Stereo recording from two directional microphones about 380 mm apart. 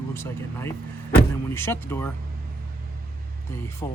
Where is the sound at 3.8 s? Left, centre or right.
Centre.